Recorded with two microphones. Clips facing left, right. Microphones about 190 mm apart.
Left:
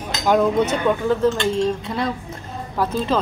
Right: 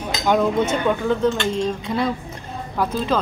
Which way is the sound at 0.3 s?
5° left (ahead or behind).